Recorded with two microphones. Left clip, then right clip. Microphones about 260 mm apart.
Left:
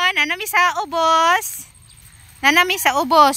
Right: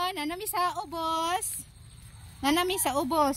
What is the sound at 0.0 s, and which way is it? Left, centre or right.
Speech, left.